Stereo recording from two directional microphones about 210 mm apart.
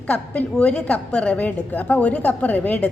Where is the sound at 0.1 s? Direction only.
5° left (ahead or behind).